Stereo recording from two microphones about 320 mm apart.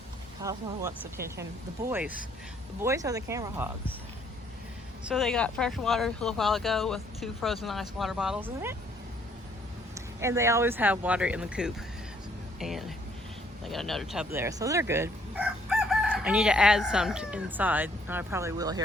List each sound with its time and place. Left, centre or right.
0.4 s speech: centre
5.0 s speech: centre
9.9 s speech: centre